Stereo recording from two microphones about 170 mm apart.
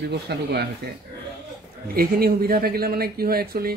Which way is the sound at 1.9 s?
60° right (ahead or behind).